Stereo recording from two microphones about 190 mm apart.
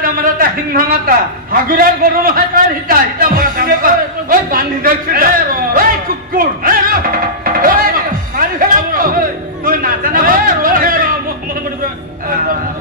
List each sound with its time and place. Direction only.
0.0 s a man's voice: 50° right (ahead or behind)
7.4 s music: 50° right (ahead or behind)
9.7 s speech: 50° right (ahead or behind)